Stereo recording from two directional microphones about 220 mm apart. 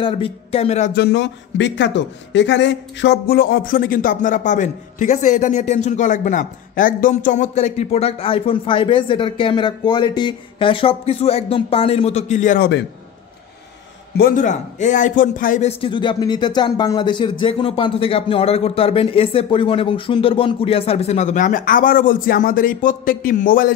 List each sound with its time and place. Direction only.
0.0 s speech: 25° left (ahead or behind)
0.9 s speech: 50° left (ahead or behind)
14.1 s speech: 40° left (ahead or behind)
15.8 s speech: 20° left (ahead or behind); by 23.7 s 40° left (ahead or behind)